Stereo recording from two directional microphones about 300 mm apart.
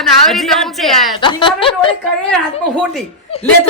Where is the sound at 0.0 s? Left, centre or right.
Centre.